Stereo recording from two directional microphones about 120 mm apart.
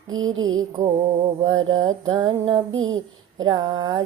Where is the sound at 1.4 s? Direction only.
40° right (ahead or behind).